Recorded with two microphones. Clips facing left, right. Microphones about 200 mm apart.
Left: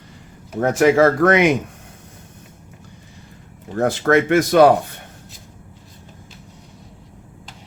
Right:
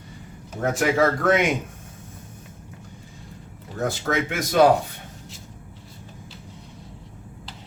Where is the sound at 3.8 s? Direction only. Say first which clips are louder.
Left 8 dB; 65° left (ahead or behind).